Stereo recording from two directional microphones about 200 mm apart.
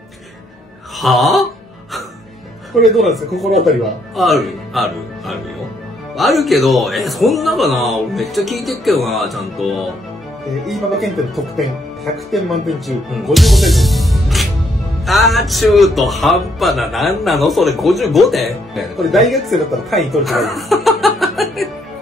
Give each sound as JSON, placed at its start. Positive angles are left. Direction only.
{"t": 0.9, "sound": "speech", "side_deg": 0}
{"t": 3.0, "sound": "speech", "side_deg": 0}